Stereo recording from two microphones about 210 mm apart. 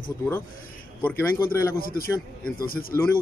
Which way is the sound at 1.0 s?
10° left (ahead or behind).